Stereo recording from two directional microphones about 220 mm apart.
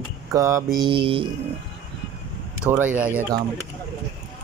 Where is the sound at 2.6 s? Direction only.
5° right (ahead or behind).